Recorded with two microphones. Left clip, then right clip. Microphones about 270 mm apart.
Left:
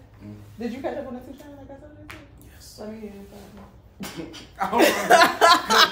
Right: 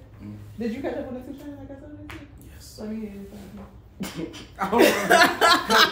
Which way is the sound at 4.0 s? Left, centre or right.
Centre.